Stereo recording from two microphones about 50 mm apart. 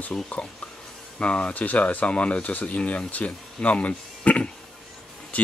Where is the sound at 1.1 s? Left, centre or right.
Left.